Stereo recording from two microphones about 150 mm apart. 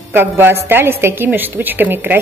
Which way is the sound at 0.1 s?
15° right (ahead or behind).